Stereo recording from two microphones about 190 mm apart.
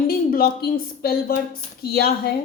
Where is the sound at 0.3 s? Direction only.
50° left (ahead or behind).